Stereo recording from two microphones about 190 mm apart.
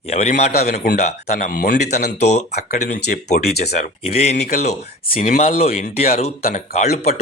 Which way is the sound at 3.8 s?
35° left (ahead or behind).